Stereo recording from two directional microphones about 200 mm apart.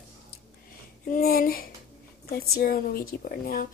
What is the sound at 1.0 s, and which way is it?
Speech, 50° left (ahead or behind).